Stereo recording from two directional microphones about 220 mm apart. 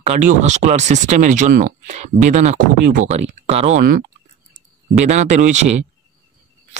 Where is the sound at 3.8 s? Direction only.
40° right (ahead or behind).